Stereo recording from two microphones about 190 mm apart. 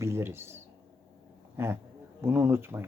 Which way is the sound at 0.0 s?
10° right (ahead or behind).